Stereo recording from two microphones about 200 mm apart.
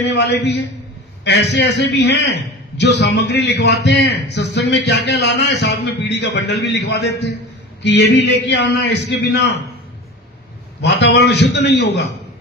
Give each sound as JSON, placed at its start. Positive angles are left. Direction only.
{"t": 0.0, "sound": "a man's voice", "side_deg": 60}
{"t": 10.8, "sound": "a man's voice", "side_deg": 60}